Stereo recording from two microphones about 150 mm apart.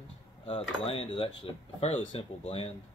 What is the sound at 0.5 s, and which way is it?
Speech, 40° left (ahead or behind).